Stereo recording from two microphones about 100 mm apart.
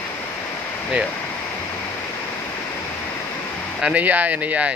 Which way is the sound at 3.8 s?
15° right (ahead or behind).